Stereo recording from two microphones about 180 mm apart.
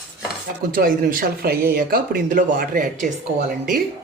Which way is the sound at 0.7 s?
55° right (ahead or behind).